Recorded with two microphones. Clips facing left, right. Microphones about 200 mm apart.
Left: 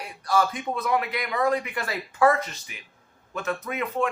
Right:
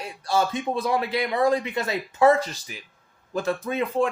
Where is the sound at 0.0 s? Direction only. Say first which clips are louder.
Even; 25° right (ahead or behind).